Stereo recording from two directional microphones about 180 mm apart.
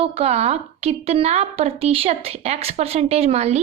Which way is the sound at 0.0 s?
35° right (ahead or behind).